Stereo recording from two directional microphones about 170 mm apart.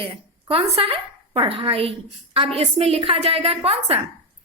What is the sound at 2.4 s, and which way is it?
A woman's voice, 35° right (ahead or behind).